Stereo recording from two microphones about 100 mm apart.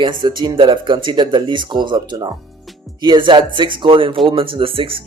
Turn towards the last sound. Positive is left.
turn(degrees=-60)  # may be behind; listen again after turning